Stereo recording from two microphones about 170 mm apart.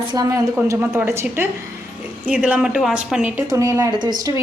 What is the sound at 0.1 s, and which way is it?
Speech, 20° right (ahead or behind).